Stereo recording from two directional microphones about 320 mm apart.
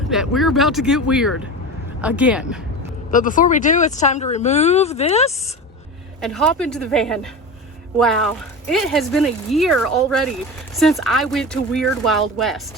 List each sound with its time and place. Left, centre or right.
0.1 s speech: centre
3.1 s speech: left
6.2 s speech: centre